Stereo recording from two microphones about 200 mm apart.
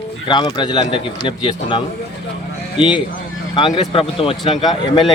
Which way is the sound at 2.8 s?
5° right (ahead or behind).